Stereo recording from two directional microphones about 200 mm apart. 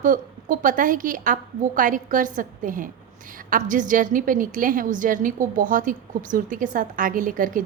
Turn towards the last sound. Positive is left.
turn(degrees=-40)  # may be behind; listen again after turning